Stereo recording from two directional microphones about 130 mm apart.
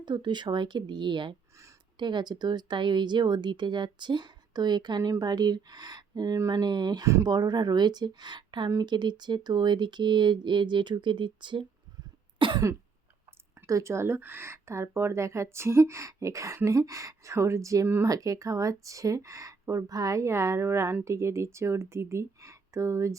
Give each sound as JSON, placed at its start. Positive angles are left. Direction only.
{"t": 0.0, "sound": "speech", "side_deg": -35}
{"t": 12.4, "sound": "cough", "side_deg": -40}
{"t": 13.7, "sound": "speech", "side_deg": -25}